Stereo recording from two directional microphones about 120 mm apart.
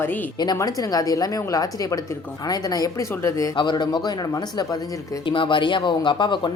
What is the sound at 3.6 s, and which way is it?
Speech, 40° left (ahead or behind).